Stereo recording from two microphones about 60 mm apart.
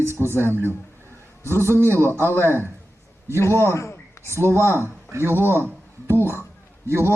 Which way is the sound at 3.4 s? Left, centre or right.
Left.